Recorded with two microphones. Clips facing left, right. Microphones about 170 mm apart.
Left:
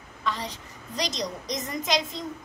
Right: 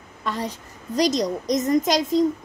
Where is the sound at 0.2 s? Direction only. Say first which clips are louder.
Right 4 dB; 50° right (ahead or behind).